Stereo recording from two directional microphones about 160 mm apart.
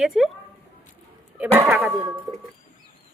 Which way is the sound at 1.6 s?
5° right (ahead or behind).